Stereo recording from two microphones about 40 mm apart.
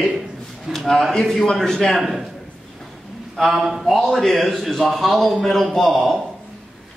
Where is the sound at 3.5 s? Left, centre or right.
Centre.